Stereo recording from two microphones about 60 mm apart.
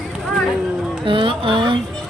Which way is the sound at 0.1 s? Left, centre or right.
Centre.